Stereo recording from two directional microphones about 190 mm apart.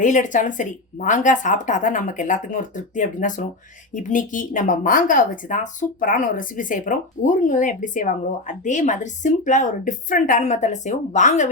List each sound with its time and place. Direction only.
0.0 s a woman's voice: 40° left (ahead or behind)